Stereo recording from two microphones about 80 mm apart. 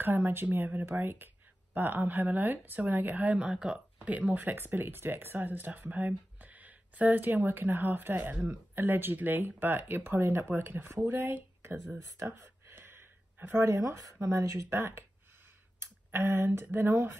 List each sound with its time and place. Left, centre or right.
0.0 s speech: right
12.2 s a sound: right
14.2 s speech: right